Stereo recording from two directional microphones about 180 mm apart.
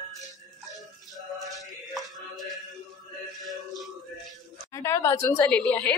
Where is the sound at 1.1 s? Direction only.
Centre (ahead or behind).